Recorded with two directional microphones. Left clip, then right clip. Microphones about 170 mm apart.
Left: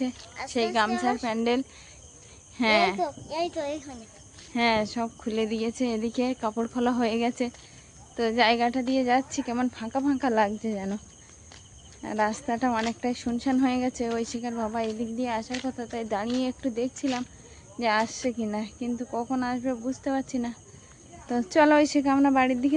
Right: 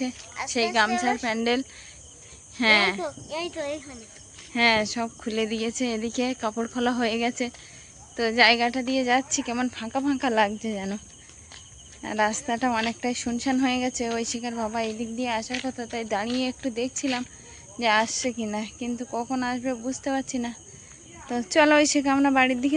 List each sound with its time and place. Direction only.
0.4 s speech: 5° left (ahead or behind)
3.0 s speech: 40° left (ahead or behind)
4.5 s speech: 5° left (ahead or behind)
12.0 s speech: centre (ahead or behind)
21.2 s speech: 15° left (ahead or behind)